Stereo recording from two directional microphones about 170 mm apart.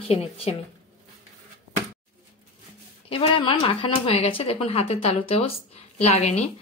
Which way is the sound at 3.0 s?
30° left (ahead or behind).